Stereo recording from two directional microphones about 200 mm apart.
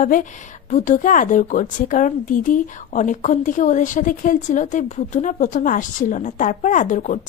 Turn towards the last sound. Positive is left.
turn(degrees=40)  # may be behind; listen again after turning